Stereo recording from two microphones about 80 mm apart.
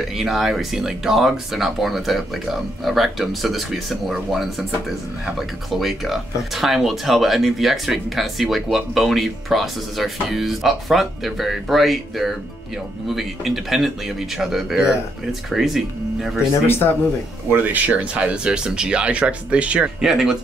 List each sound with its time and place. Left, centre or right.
0.1 s speech: centre
16.6 s speech: left
17.5 s speech: right
20.0 s speech: centre